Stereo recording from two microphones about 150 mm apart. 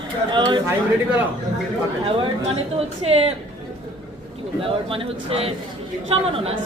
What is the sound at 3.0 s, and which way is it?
Speech, 40° right (ahead or behind).